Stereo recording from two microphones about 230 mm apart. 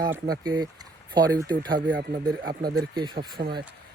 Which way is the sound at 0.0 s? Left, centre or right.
Centre.